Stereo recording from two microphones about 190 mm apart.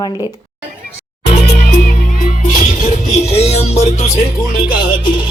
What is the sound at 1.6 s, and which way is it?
Music, 50° left (ahead or behind).